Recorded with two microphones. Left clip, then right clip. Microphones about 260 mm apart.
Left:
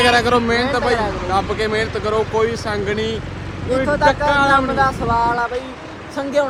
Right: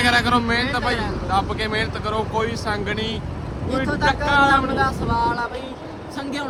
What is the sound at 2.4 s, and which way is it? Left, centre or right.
Speech, centre.